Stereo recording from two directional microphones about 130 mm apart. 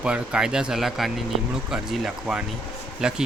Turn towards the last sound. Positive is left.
turn(degrees=-5)  # may be behind; listen again after turning